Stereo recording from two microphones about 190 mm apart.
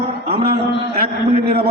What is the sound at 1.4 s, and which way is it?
Speech, 55° right (ahead or behind).